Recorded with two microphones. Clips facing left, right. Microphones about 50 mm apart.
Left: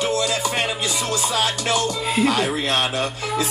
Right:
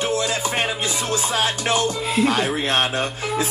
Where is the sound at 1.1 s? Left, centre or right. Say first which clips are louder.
Right 1 dB; right.